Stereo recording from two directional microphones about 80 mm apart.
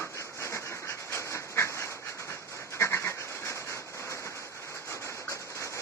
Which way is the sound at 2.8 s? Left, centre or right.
Left.